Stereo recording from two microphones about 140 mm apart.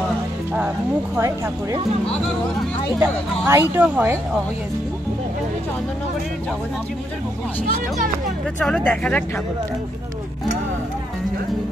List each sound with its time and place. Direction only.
1.1 s speech: 20° right (ahead or behind)
3.0 s speech: 15° right (ahead or behind)
8.5 s speech: 5° left (ahead or behind)